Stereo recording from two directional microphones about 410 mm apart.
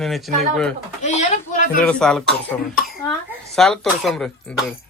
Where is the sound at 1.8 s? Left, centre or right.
Centre.